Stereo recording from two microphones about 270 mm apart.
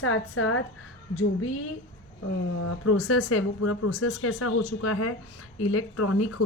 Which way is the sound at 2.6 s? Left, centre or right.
Left.